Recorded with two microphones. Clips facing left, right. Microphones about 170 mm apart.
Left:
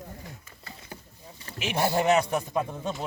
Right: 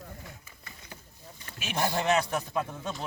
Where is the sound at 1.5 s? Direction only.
15° left (ahead or behind).